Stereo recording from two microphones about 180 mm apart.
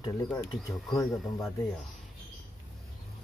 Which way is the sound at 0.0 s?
25° left (ahead or behind).